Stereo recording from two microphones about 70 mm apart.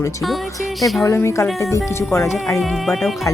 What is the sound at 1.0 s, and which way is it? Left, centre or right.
Speech, left.